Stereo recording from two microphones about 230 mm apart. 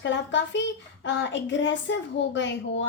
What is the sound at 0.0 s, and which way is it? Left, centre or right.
A child's voice, left.